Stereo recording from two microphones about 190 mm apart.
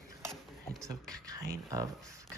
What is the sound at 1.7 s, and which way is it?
Speech, 15° right (ahead or behind).